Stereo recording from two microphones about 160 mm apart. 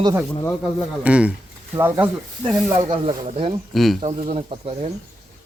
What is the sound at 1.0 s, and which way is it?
Speech, 10° right (ahead or behind).